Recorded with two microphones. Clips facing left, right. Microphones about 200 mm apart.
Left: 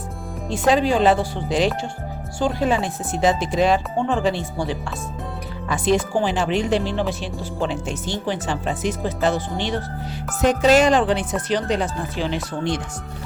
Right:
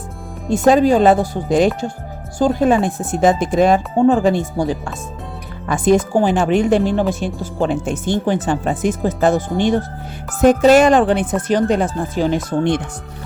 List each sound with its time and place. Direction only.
0.4 s speech: 45° right (ahead or behind)